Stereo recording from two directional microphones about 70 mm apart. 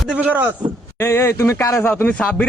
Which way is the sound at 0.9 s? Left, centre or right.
Left.